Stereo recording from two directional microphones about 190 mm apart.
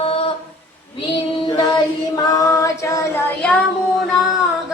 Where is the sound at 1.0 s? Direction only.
25° left (ahead or behind).